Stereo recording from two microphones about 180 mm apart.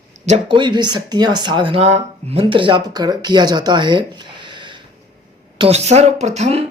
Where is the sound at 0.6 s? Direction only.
25° right (ahead or behind).